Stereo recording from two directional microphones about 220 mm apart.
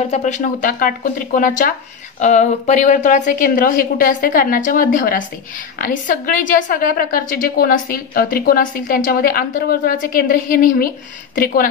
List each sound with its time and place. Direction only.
0.1 s a woman's voice: 35° left (ahead or behind)